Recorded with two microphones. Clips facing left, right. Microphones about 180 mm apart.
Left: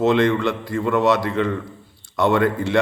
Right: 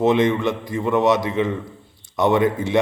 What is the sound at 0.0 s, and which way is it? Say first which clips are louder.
A man's voice: even; 20° right (ahead or behind).